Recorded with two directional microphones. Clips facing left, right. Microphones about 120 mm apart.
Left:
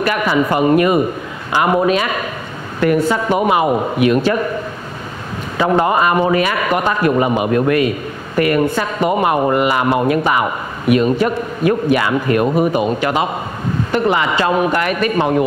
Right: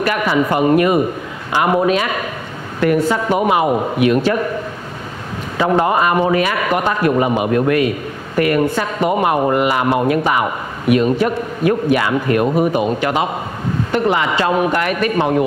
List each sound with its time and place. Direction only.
0.0 s a man's voice: 20° left (ahead or behind)
5.6 s a man's voice: 25° left (ahead or behind)
11.9 s a man's voice: 25° left (ahead or behind)